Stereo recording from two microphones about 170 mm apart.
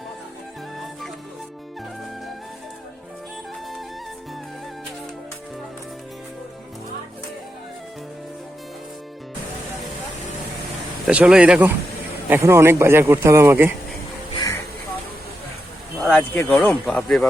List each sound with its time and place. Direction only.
11.0 s speech: 5° right (ahead or behind)
12.3 s speech: 15° right (ahead or behind)
16.0 s speech: centre (ahead or behind)